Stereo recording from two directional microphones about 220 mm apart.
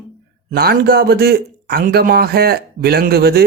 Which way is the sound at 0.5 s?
45° right (ahead or behind).